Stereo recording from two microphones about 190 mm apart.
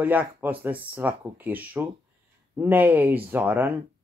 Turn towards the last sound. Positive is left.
turn(degrees=-10)  # may be behind; listen again after turning